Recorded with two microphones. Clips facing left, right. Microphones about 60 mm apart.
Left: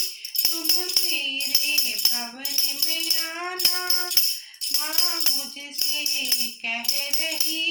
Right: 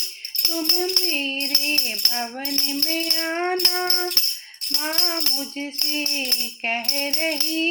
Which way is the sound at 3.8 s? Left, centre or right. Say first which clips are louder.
Right 5 dB; right.